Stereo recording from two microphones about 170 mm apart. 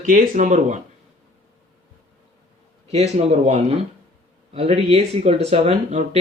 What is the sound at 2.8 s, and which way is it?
Speech, 40° right (ahead or behind).